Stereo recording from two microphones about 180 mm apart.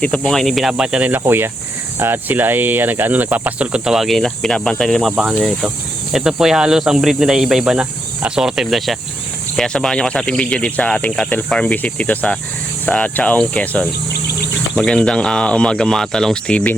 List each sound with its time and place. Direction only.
0.0 s speech: 5° left (ahead or behind)
1.2 s cricket: 10° right (ahead or behind)
6.1 s speech: centre (ahead or behind)